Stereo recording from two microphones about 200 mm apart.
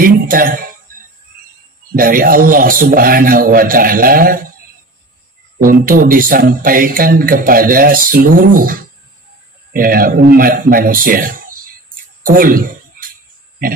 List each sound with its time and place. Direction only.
0.0 s speech: 45° right (ahead or behind)
2.0 s speech: 45° right (ahead or behind)
5.6 s a man's voice: 45° right (ahead or behind)
12.2 s a sound: 45° right (ahead or behind)